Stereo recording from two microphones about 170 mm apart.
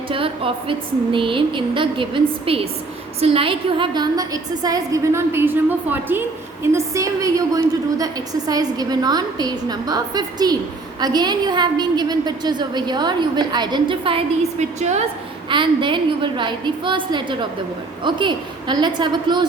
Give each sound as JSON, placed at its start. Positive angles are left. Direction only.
{"t": 0.1, "sound": "a woman's voice", "side_deg": -30}
{"t": 15.4, "sound": "a woman's voice", "side_deg": -30}